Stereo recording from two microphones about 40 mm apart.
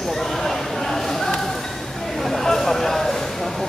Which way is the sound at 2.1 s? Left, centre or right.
Centre.